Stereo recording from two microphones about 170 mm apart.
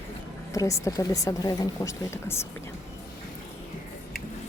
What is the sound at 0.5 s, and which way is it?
A woman's voice, 20° left (ahead or behind).